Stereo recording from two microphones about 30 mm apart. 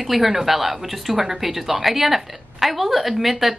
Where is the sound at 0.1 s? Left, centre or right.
Centre.